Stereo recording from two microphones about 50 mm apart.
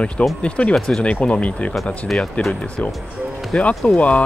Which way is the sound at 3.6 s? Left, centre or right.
Left.